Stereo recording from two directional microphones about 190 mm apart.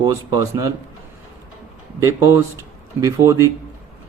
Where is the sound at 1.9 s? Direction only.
15° right (ahead or behind).